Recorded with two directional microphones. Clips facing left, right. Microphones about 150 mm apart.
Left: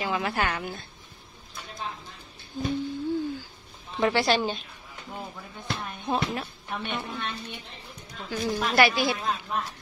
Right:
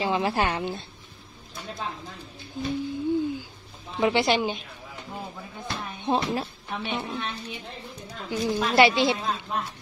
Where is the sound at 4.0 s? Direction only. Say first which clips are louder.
Right 1 dB; 20° right (ahead or behind).